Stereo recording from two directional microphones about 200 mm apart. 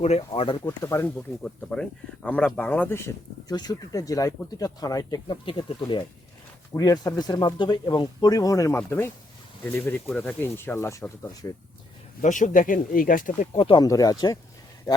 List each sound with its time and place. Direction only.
0.0 s speech: 30° left (ahead or behind)
0.6 s speech: 15° left (ahead or behind)
12.2 s speech: 40° left (ahead or behind)
13.7 s a man's voice: 20° left (ahead or behind)